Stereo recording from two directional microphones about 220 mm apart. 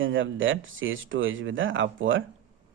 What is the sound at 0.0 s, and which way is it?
Speech, 60° right (ahead or behind).